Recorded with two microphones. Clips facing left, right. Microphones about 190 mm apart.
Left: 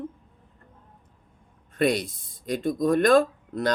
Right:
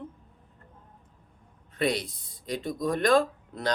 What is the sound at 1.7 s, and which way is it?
Speech, 50° left (ahead or behind).